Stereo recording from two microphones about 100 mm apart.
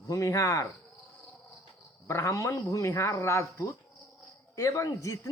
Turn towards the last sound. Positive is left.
turn(degrees=30)  # may be behind; listen again after turning